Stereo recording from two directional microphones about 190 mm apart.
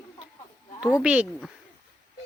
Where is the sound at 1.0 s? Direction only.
5° right (ahead or behind).